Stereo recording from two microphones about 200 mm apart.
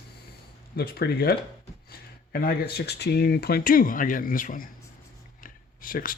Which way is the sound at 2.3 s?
50° left (ahead or behind).